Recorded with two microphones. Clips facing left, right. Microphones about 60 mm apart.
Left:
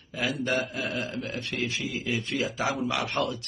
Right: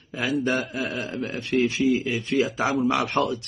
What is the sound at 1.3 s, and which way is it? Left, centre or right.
Speech, right.